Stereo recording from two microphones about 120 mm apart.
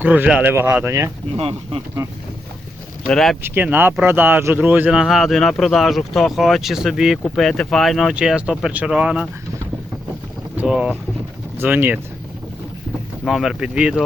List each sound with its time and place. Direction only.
0.0 s speech: 15° right (ahead or behind)
1.4 s speech: 50° right (ahead or behind)
3.1 s speech: 5° left (ahead or behind)
3.4 s speech: 15° right (ahead or behind)
10.6 s speech: 10° right (ahead or behind)
13.2 s speech: centre (ahead or behind)